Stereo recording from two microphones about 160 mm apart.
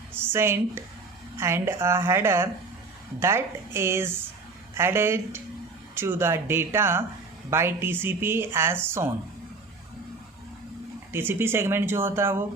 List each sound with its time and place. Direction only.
0.3 s speech: 15° right (ahead or behind)
11.1 s speech: 15° right (ahead or behind)